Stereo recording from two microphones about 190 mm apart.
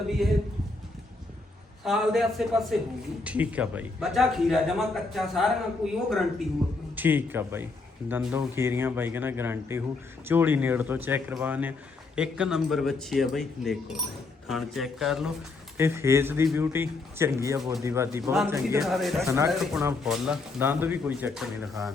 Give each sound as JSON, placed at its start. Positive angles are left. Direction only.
{"t": 0.2, "sound": "a man's voice", "side_deg": 0}
{"t": 1.8, "sound": "a man's voice", "side_deg": 0}
{"t": 15.8, "sound": "a man's voice", "side_deg": -15}
{"t": 18.8, "sound": "a man's voice", "side_deg": 0}
{"t": 19.2, "sound": "a man's voice", "side_deg": -15}
{"t": 19.5, "sound": "a man's voice", "side_deg": 0}